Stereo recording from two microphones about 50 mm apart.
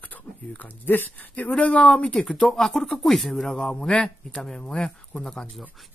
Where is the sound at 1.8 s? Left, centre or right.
Centre.